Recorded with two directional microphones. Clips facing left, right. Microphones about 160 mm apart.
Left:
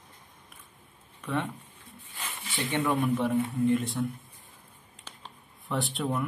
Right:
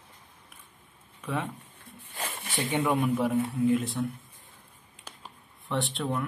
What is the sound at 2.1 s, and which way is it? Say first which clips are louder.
Snake: right 4 dB; 40° right (ahead or behind).